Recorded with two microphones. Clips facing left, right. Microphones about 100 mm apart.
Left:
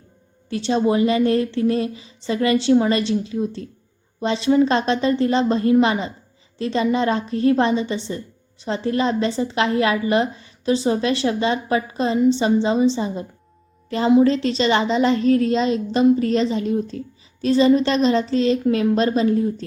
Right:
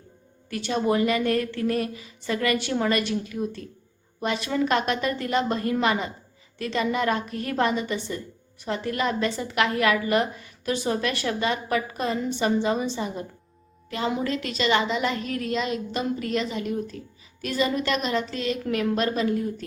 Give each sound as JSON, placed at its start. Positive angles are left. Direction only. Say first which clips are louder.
{"t": 0.5, "sound": "a woman's voice", "louder": "left 5 dB", "side_deg": 25}
{"t": 14.3, "sound": "a woman's voice", "louder": "left 7 dB", "side_deg": 30}